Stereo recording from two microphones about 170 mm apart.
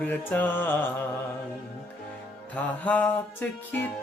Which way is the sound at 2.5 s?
10° left (ahead or behind).